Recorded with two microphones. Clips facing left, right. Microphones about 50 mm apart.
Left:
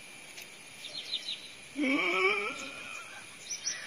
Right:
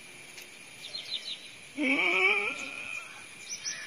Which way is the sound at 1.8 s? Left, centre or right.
Right.